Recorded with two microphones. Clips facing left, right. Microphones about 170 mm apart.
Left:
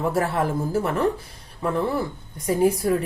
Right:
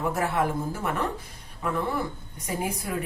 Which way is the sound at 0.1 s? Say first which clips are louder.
Left 3 dB; 35° left (ahead or behind).